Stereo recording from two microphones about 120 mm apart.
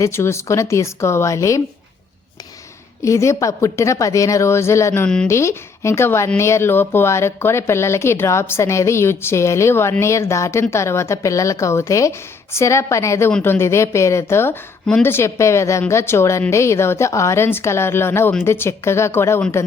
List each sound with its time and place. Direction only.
0.0 s speech: 20° left (ahead or behind)
3.0 s speech: 25° left (ahead or behind)
5.0 s speech: 5° left (ahead or behind)
5.3 s speech: 25° left (ahead or behind)